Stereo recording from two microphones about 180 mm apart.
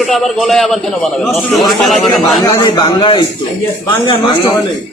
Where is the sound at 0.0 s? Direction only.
Centre (ahead or behind).